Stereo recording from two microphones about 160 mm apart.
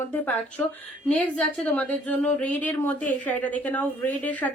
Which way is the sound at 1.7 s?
10° left (ahead or behind).